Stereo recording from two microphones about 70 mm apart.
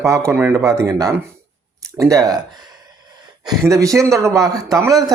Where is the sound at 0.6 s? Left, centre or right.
Right.